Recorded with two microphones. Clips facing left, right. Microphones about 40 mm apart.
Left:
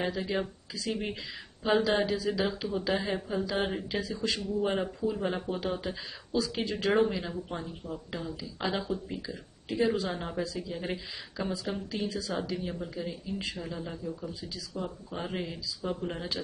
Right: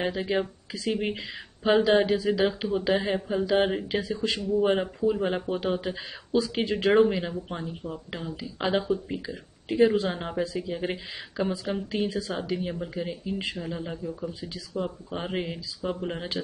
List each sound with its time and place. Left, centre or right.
0.0 s speech: right